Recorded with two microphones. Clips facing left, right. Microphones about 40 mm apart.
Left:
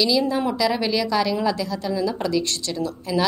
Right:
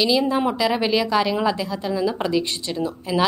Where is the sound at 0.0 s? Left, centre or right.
Right.